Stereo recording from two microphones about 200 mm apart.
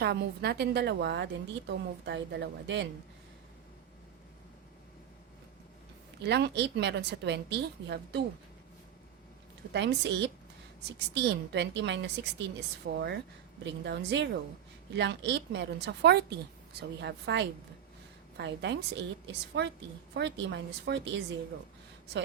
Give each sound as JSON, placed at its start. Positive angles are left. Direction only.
{"t": 0.0, "sound": "a woman's voice", "side_deg": -55}
{"t": 6.2, "sound": "a woman's voice", "side_deg": -55}
{"t": 9.7, "sound": "a woman's voice", "side_deg": -60}